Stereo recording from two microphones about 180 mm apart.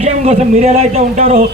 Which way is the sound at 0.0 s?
35° right (ahead or behind).